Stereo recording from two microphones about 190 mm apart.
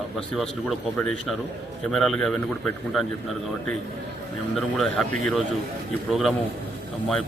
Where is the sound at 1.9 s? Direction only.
Centre (ahead or behind).